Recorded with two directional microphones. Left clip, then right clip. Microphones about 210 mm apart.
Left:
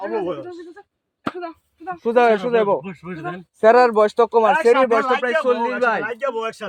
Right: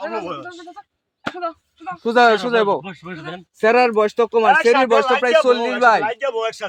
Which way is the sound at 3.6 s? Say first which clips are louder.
Left 2 dB; 25° right (ahead or behind).